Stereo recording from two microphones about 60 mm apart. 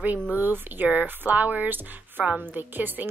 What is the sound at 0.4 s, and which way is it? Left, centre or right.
A woman's voice, right.